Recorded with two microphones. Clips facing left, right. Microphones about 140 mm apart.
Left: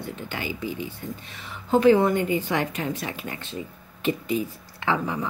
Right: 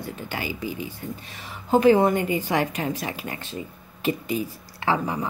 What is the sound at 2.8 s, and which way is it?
Speech, 35° right (ahead or behind).